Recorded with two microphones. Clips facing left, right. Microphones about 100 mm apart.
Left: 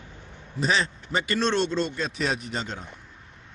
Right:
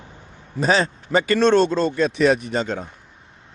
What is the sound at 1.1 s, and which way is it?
Speech, 50° right (ahead or behind).